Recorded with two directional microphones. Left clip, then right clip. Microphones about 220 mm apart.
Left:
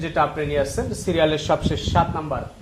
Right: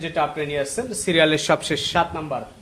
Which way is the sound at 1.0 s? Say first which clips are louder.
Right 2 dB; 15° right (ahead or behind).